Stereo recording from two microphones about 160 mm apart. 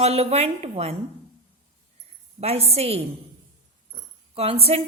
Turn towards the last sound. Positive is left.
turn(degrees=-40)  # may be behind; listen again after turning